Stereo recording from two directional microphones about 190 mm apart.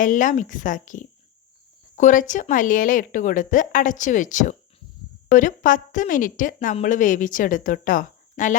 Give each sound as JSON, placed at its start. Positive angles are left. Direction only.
{"t": 0.0, "sound": "a woman's voice", "side_deg": 45}